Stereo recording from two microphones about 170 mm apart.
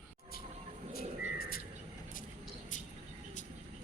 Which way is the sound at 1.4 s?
60° left (ahead or behind).